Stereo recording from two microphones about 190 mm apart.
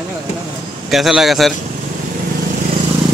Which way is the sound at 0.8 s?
Centre (ahead or behind).